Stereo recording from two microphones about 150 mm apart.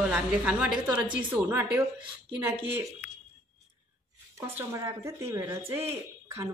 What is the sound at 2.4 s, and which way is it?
Speech, 15° right (ahead or behind).